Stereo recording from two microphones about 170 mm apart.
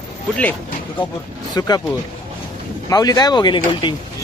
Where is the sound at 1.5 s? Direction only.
20° left (ahead or behind).